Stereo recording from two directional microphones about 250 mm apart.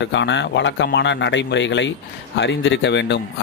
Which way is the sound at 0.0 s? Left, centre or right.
Left.